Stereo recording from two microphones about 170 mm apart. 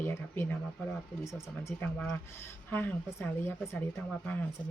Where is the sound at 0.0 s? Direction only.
15° left (ahead or behind).